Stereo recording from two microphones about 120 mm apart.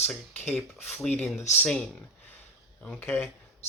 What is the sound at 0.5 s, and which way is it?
Speech, 15° left (ahead or behind).